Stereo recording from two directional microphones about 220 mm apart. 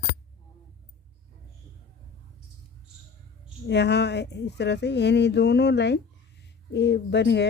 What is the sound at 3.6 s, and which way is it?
Speech, 50° left (ahead or behind).